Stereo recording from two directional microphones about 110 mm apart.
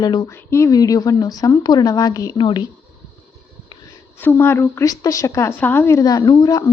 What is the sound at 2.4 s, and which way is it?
Speech, 50° left (ahead or behind).